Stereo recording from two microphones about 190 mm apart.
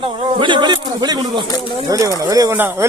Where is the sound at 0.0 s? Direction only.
25° right (ahead or behind).